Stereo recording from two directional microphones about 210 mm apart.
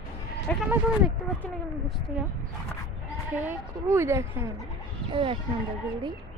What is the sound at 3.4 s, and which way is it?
Speech, 10° right (ahead or behind).